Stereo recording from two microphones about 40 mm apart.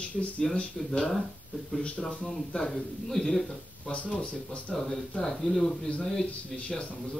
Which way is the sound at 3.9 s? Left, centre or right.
Left.